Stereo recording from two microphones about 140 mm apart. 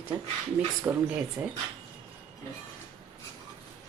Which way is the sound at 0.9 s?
10° right (ahead or behind).